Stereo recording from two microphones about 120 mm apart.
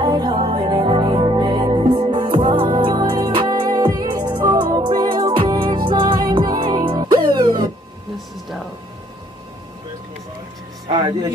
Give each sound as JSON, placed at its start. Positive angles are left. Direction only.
{"t": 0.0, "sound": "music", "side_deg": -40}
{"t": 6.4, "sound": "music", "side_deg": -35}
{"t": 10.9, "sound": "speech", "side_deg": -35}